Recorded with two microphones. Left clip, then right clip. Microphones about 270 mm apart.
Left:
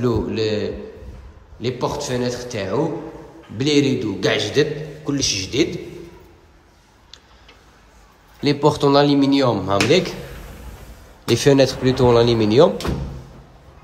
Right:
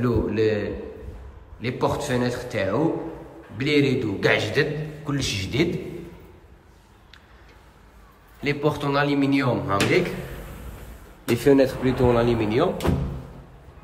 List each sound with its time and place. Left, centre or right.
0.0 s a man's voice: centre
8.4 s speech: centre
11.3 s speech: left